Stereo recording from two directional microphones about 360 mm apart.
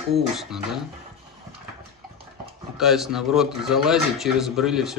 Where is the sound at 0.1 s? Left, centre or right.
Centre.